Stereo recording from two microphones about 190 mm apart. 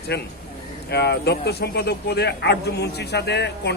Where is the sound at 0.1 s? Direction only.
60° left (ahead or behind).